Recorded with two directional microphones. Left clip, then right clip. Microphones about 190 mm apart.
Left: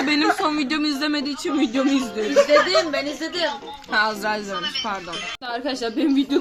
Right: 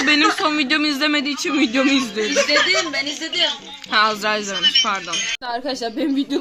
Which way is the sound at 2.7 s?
50° left (ahead or behind).